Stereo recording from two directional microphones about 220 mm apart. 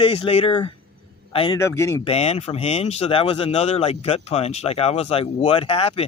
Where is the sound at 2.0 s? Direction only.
30° left (ahead or behind).